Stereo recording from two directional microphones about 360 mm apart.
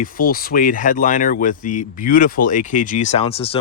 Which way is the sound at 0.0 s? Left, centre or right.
Left.